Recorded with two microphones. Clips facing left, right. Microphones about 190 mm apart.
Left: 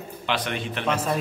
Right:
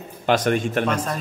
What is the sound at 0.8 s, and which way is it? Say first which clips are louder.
Speech: right 1 dB; 10° left (ahead or behind).